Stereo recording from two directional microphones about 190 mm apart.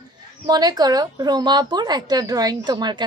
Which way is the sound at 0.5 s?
20° right (ahead or behind).